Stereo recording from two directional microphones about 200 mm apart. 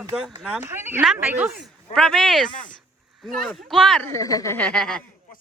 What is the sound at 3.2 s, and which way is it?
Speech, centre (ahead or behind).